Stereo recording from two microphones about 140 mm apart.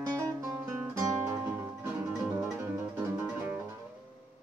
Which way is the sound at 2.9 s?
15° right (ahead or behind).